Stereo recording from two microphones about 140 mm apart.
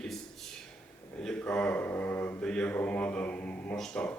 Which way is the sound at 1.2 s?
5° left (ahead or behind).